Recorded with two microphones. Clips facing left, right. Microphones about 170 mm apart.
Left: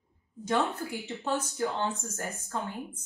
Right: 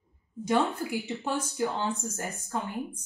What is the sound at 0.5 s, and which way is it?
Speech, 10° right (ahead or behind).